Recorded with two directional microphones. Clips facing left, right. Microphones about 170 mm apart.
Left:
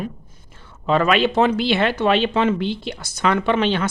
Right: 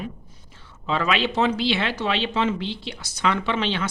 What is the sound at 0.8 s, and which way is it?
Speech, 50° left (ahead or behind).